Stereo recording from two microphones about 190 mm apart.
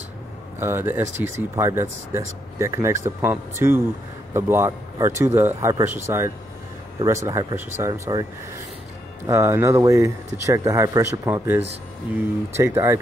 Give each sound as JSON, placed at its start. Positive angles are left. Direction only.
{"t": 0.6, "sound": "speech", "side_deg": -10}